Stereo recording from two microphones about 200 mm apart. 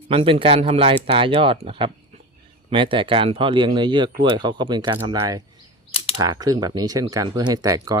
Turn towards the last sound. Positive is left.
turn(degrees=-15)  # may be behind; listen again after turning